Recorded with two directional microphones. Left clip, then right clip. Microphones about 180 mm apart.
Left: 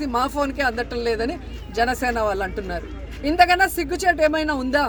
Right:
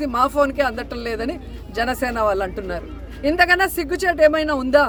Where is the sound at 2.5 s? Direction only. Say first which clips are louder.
Right 1 dB; 5° right (ahead or behind).